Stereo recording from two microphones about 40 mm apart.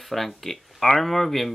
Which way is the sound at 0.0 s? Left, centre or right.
Centre.